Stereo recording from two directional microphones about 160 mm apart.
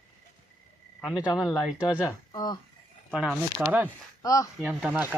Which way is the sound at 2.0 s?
25° left (ahead or behind).